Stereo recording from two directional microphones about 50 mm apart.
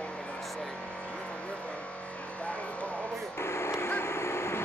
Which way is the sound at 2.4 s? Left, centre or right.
Left.